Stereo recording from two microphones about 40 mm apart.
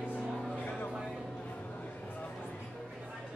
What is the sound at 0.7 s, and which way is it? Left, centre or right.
Music, left.